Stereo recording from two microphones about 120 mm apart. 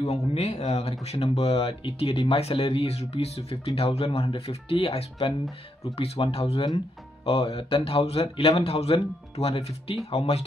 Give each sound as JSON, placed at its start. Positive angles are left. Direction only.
{"t": 0.0, "sound": "speech", "side_deg": 60}